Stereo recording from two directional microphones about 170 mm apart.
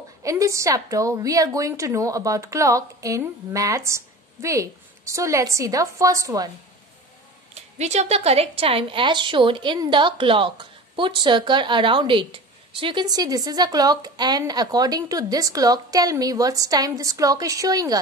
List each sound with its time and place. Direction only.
0.2 s a woman's voice: 20° right (ahead or behind)
7.5 s a woman's voice: 40° right (ahead or behind); by 17.9 s 20° right (ahead or behind)